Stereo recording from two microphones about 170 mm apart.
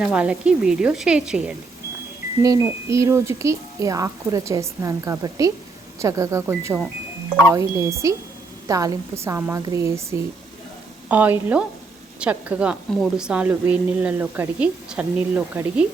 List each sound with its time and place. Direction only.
0.0 s speech: 5° right (ahead or behind)
2.4 s speech: 15° right (ahead or behind)